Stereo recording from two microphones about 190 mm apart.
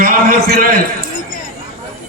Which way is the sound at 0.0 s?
50° right (ahead or behind).